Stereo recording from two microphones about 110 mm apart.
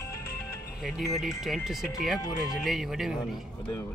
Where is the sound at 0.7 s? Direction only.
5° right (ahead or behind).